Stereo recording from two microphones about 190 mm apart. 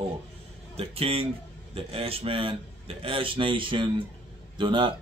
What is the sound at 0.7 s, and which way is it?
A man's voice, 30° right (ahead or behind).